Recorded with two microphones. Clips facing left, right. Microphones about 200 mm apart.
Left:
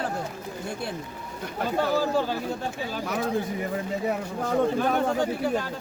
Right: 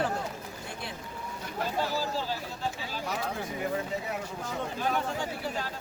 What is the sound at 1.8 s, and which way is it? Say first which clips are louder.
Speech: left 9 dB; 55° left (ahead or behind).